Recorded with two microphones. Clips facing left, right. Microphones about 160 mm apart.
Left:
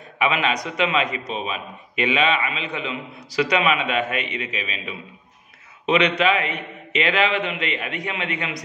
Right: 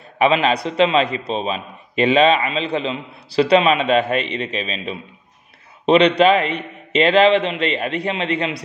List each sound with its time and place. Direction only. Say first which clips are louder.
0.2 s a man's voice: right 6 dB; 30° right (ahead or behind)